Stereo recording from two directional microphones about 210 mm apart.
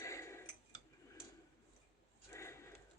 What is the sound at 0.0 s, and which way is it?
Tick-tock, 15° left (ahead or behind).